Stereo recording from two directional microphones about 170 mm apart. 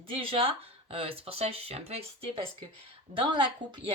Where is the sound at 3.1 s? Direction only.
30° right (ahead or behind).